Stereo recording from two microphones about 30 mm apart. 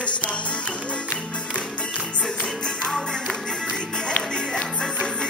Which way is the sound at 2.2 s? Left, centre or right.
Left.